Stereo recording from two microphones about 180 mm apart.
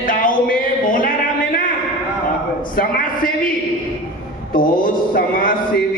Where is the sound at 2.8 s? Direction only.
50° left (ahead or behind).